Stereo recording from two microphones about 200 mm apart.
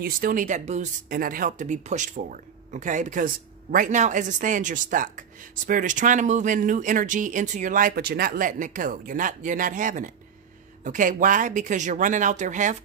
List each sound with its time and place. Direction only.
0.0 s speech: 45° right (ahead or behind)